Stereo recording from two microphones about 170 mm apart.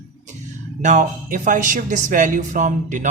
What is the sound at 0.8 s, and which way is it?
Speech, 45° right (ahead or behind).